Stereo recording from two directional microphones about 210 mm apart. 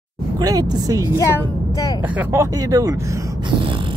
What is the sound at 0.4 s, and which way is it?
Speech, 15° right (ahead or behind).